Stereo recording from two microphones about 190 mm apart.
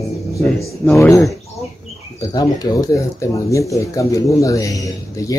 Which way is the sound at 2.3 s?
20° left (ahead or behind).